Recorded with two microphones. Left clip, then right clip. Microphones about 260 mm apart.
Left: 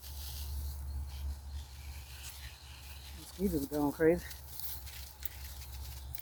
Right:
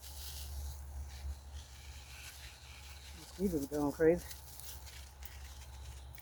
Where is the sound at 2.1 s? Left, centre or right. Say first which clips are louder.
Left 2 dB; centre.